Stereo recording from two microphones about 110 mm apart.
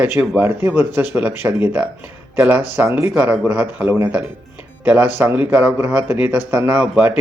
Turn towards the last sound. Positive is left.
turn(degrees=-15)  # may be behind; listen again after turning